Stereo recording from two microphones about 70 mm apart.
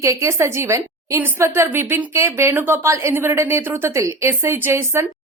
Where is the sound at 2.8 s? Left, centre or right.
Right.